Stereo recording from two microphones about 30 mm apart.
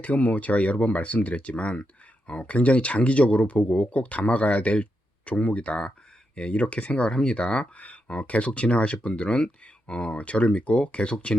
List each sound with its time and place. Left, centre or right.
0.0 s speech: left
5.6 s speech: left
7.1 s speech: left
7.8 s speech: left